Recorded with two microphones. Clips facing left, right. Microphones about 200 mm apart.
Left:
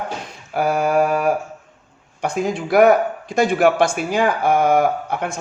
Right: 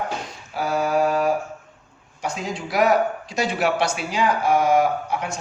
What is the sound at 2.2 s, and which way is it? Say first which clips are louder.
A man's voice: left 7 dB; 55° left (ahead or behind).